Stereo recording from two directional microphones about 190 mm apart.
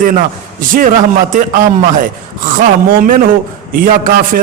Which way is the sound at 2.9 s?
50° right (ahead or behind).